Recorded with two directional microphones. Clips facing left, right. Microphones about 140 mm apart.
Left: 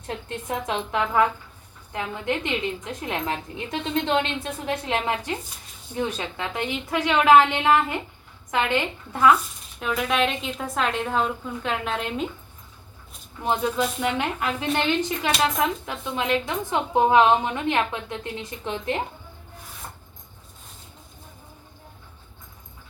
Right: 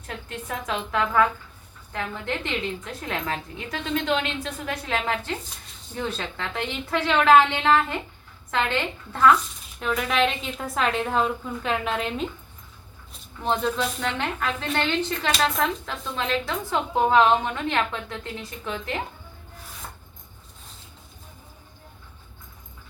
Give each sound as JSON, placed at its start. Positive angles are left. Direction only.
{"t": 0.1, "sound": "a woman's voice", "side_deg": 25}
{"t": 13.4, "sound": "a woman's voice", "side_deg": 10}